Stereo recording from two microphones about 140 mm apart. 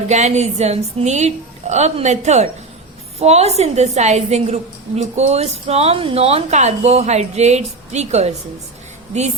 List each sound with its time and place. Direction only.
0.1 s a woman's voice: 55° right (ahead or behind)